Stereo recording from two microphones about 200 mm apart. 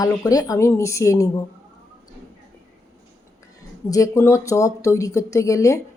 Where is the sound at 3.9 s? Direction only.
15° left (ahead or behind).